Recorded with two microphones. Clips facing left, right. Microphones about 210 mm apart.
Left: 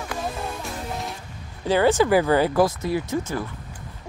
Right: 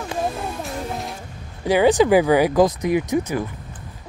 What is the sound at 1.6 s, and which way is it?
Speech, 15° right (ahead or behind).